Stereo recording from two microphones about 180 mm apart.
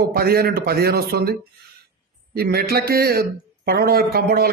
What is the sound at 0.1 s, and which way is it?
A man's voice, 60° right (ahead or behind).